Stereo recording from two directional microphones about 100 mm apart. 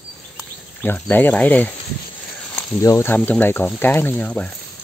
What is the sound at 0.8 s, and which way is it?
Speech, 20° left (ahead or behind).